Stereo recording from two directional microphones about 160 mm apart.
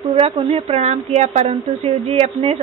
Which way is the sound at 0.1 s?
35° right (ahead or behind).